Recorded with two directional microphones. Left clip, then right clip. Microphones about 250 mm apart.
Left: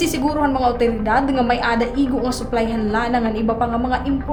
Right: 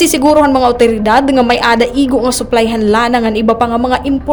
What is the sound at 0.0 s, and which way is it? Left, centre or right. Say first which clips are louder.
A woman's voice: right 11 dB; right.